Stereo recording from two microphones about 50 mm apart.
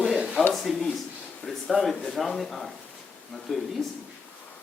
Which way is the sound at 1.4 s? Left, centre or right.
Left.